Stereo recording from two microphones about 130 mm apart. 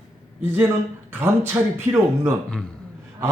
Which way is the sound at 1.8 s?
20° right (ahead or behind).